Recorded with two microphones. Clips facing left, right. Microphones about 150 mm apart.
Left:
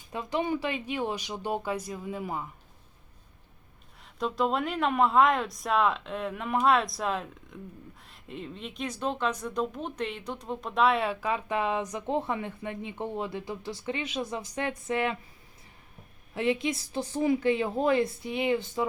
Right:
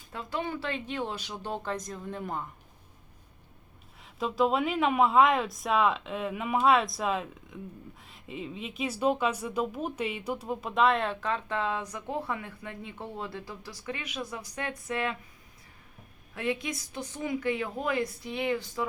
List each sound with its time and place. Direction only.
0.1 s speech: 20° left (ahead or behind)
4.0 s a woman's voice: centre (ahead or behind); by 15.1 s 20° left (ahead or behind)
16.3 s a woman's voice: 25° left (ahead or behind)